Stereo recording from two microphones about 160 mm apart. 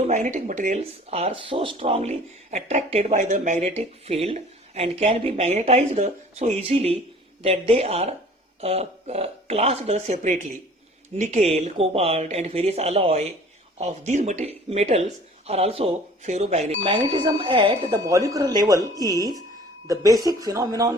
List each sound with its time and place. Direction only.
0.1 s speech: 50° right (ahead or behind); by 18.0 s 30° right (ahead or behind)
18.0 s speech: 20° right (ahead or behind)